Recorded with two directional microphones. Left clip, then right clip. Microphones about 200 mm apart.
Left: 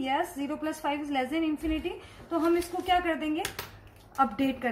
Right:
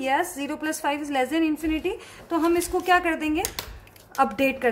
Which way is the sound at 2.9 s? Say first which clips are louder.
Right 5 dB; 40° right (ahead or behind).